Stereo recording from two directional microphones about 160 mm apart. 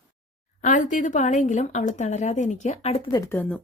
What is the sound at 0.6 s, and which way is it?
Speech, 55° left (ahead or behind).